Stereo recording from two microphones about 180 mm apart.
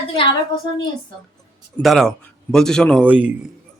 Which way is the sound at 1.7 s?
Centre (ahead or behind).